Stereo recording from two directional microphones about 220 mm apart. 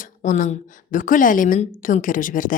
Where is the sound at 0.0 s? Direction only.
35° left (ahead or behind).